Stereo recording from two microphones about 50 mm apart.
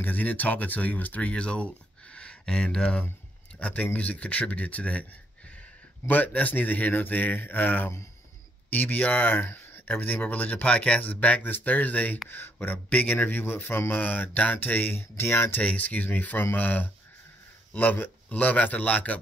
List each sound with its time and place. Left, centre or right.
0.0 s a man's voice: left
2.1 s a sound: left
2.5 s speech: centre
6.0 s a man's voice: left
15.6 s a man's voice: left
18.3 s a man's voice: left